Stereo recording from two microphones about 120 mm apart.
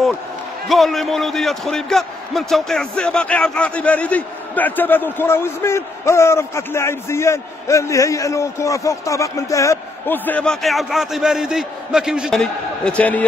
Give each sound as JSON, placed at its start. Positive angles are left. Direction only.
{"t": 0.7, "sound": "a man's voice", "side_deg": 0}